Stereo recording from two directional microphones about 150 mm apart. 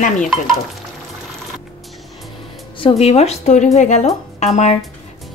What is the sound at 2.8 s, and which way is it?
Speech, 40° left (ahead or behind).